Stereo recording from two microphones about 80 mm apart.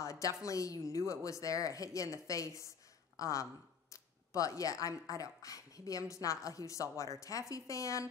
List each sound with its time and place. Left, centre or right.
0.0 s speech: left